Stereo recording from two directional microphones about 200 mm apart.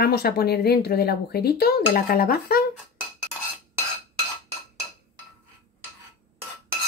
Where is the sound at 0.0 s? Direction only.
50° left (ahead or behind).